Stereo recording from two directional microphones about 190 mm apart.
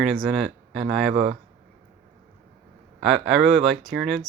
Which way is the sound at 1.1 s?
30° right (ahead or behind).